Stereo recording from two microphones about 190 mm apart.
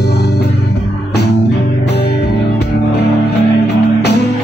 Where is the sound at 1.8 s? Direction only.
60° left (ahead or behind).